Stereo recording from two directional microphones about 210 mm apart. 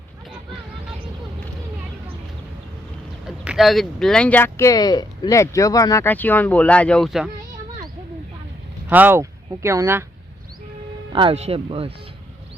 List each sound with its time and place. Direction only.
3.2 s speech: 5° right (ahead or behind)
8.9 s speech: 10° right (ahead or behind)
11.1 s speech: 25° right (ahead or behind)